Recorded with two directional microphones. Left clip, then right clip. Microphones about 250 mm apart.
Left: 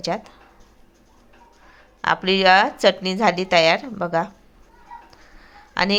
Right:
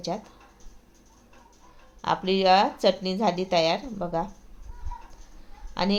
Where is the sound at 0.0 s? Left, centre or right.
Centre.